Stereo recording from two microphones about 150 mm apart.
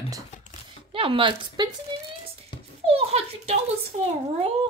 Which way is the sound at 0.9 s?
35° right (ahead or behind).